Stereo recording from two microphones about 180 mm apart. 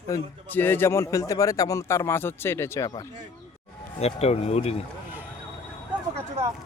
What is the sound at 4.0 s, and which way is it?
Speech, 35° left (ahead or behind).